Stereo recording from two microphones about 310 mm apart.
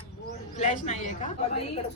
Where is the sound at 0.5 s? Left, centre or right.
Left.